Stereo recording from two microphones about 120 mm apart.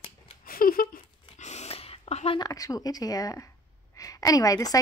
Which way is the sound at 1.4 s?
65° left (ahead or behind).